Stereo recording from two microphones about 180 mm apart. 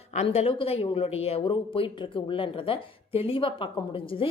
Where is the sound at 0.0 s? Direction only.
35° left (ahead or behind).